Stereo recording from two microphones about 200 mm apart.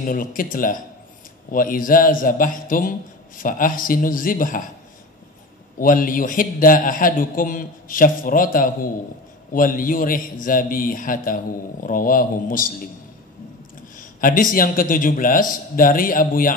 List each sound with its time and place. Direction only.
0.0 s a man's voice: 45° left (ahead or behind)
5.8 s a man's voice: 45° left (ahead or behind)
13.9 s a man's voice: 45° left (ahead or behind)